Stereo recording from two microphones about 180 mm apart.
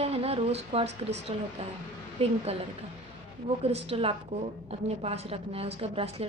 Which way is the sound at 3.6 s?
35° right (ahead or behind).